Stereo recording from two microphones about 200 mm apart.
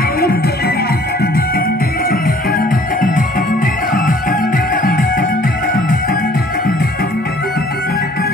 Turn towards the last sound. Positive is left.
turn(degrees=50)  # may be behind; listen again after turning